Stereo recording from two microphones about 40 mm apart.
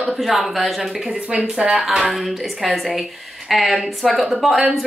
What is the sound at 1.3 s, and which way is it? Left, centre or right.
Speech, right.